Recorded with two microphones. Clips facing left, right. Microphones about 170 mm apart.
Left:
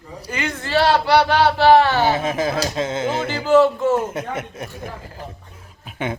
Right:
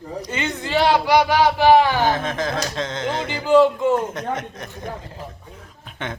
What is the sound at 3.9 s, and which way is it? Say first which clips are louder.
Speech: even; 10° left (ahead or behind).